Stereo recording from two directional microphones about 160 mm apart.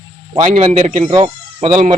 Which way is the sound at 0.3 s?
50° right (ahead or behind).